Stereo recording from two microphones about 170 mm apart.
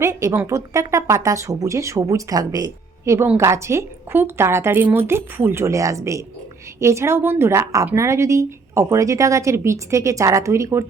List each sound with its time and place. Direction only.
0.0 s speech: 20° right (ahead or behind)